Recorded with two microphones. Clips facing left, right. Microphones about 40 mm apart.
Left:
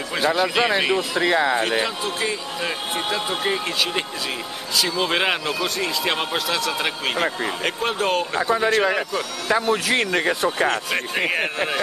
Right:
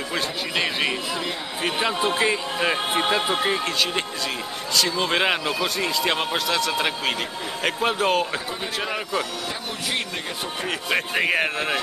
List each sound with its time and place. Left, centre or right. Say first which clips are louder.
0.4 s speech: left 4 dB; centre
1.1 s speech: left 10 dB; left
1.8 s a man's voice: right 2 dB; centre
3.4 s speech: even; centre
10.9 s speech: right 1 dB; centre